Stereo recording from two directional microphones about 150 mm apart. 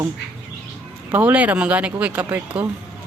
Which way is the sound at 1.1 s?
10° right (ahead or behind).